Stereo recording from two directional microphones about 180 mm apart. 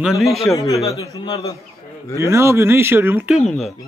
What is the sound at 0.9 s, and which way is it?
Speech, 20° left (ahead or behind).